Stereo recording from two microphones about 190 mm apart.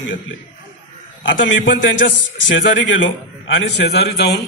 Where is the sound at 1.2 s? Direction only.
75° left (ahead or behind).